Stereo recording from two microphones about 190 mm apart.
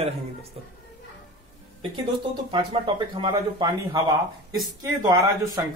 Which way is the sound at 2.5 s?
25° right (ahead or behind).